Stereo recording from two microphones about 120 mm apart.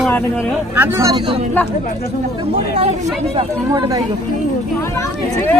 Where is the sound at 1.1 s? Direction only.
45° right (ahead or behind).